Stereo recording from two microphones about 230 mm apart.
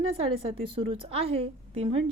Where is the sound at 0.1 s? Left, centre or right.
Right.